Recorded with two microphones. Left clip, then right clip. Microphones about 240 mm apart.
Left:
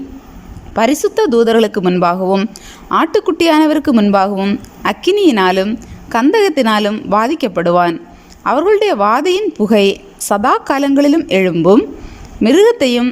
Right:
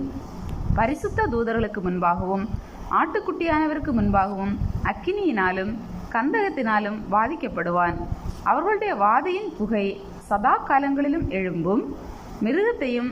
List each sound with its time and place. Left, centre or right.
0.8 s speech: left
2.9 s a woman's voice: left
12.4 s a woman's voice: left